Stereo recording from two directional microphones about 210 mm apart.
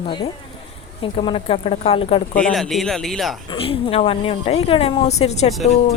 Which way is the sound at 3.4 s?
25° left (ahead or behind).